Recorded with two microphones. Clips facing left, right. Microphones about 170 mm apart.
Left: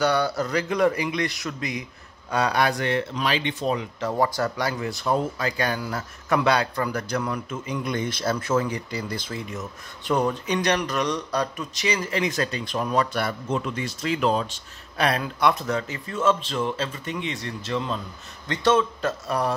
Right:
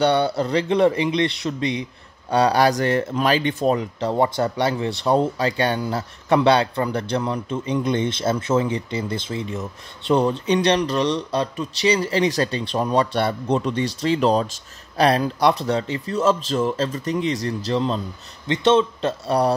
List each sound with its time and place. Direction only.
0.0 s speech: 25° right (ahead or behind); by 3.8 s 45° right (ahead or behind)
4.0 s speech: 25° right (ahead or behind)